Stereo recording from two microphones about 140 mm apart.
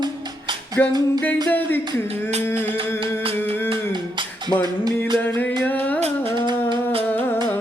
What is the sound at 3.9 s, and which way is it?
Music, 30° right (ahead or behind).